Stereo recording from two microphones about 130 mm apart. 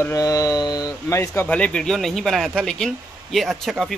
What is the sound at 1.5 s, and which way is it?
Speech, 10° left (ahead or behind).